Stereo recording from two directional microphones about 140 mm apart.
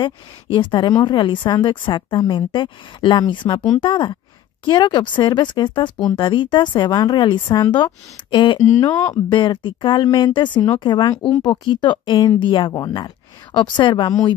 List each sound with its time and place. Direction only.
0.0 s speech: 35° left (ahead or behind)
8.6 s speech: 20° left (ahead or behind)
9.3 s speech: 30° left (ahead or behind)